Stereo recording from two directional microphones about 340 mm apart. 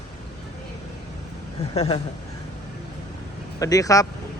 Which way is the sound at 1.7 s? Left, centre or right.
Centre.